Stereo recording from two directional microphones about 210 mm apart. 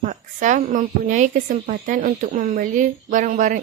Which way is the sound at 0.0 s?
35° right (ahead or behind).